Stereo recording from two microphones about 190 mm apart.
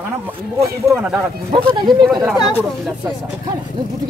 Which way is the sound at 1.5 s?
25° right (ahead or behind).